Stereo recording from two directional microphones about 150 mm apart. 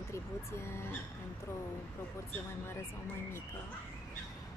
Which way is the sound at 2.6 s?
15° left (ahead or behind).